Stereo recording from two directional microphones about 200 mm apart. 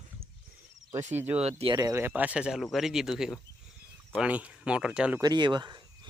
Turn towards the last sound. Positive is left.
turn(degrees=-20)  # may be behind; listen again after turning